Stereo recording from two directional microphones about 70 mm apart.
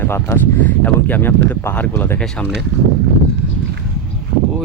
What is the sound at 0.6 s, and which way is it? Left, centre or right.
Speech, left.